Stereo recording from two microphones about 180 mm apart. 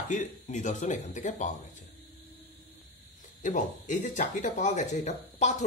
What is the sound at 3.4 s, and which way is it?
Speech, 45° left (ahead or behind).